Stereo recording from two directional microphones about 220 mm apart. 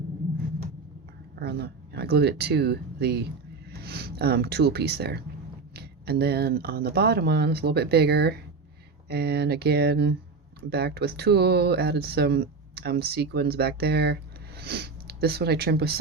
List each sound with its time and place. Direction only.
1.4 s speech: 45° right (ahead or behind)